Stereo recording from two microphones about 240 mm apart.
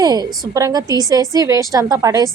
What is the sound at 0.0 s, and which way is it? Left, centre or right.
A woman's voice, centre.